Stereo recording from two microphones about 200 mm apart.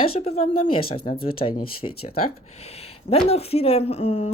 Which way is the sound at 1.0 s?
45° left (ahead or behind).